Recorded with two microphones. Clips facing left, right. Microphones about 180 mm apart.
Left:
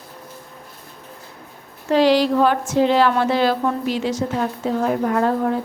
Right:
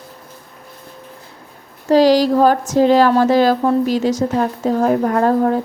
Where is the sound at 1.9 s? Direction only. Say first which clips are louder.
Right 4 dB; 40° right (ahead or behind).